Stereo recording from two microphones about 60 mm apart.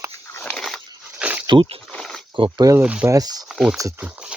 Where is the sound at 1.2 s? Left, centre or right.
Right.